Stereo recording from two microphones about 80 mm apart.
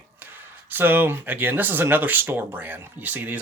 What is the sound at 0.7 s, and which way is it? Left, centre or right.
Speech, right.